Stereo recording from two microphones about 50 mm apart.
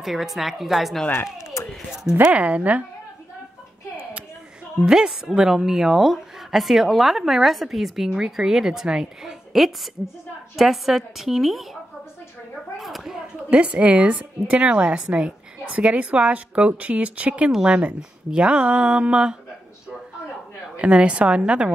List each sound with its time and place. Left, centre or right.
0.0 s a woman's voice: centre
1.1 s speech: left
2.2 s a woman's voice: right
4.8 s a woman's voice: centre
12.7 s a sound: centre
13.5 s a woman's voice: right
20.7 s a woman's voice: right